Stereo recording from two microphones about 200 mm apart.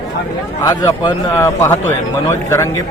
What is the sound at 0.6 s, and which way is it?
Speech, 20° left (ahead or behind).